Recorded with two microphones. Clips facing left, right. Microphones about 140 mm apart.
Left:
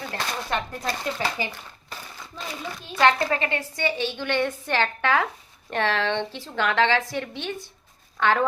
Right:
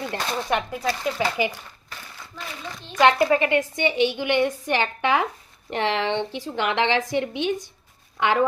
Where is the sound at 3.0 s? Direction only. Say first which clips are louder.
Right 3 dB; 15° right (ahead or behind).